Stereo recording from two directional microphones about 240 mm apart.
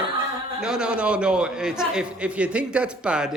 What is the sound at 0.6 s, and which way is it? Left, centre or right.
A man's voice, centre.